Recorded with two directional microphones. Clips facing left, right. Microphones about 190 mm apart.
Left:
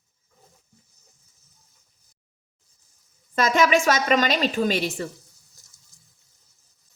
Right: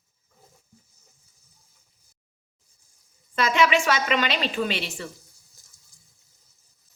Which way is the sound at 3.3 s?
45° left (ahead or behind).